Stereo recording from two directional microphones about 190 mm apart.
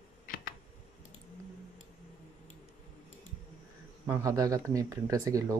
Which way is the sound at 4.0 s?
15° right (ahead or behind).